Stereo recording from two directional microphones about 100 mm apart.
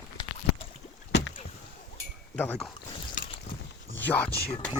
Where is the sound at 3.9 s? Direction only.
15° left (ahead or behind).